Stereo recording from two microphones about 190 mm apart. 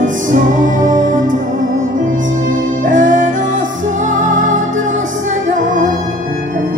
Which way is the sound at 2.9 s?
45° right (ahead or behind).